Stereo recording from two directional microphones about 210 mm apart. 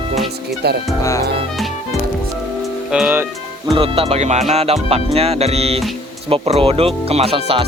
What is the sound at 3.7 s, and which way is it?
Speech, 25° right (ahead or behind).